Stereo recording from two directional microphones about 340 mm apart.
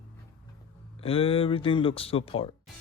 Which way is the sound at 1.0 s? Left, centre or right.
Centre.